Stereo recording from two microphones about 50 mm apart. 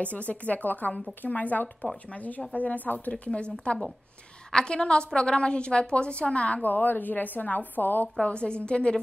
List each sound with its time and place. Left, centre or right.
0.0 s a woman's voice: left
3.3 s a woman's voice: centre; by 8.1 s left
8.2 s a woman's voice: centre